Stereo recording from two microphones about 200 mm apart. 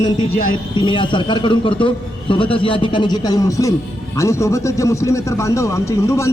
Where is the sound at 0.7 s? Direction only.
25° left (ahead or behind).